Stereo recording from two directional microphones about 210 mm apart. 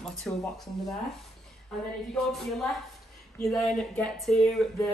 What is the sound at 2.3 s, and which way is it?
Speech, centre (ahead or behind).